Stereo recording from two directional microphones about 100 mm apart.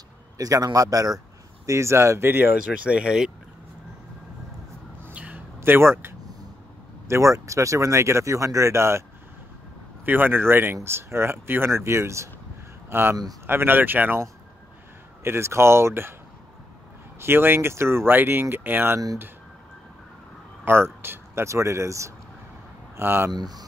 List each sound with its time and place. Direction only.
0.4 s speech: 40° right (ahead or behind)
1.7 s speech: 30° right (ahead or behind)
2.5 s speech: 10° right (ahead or behind)
5.0 s a sound: 15° right (ahead or behind)
5.6 s speech: 25° right (ahead or behind)
10.0 s speech: 20° right (ahead or behind)
15.2 s speech: 25° right (ahead or behind)
17.2 s speech: 25° right (ahead or behind)
20.6 s speech: 25° right (ahead or behind)
23.3 s speech: 45° right (ahead or behind)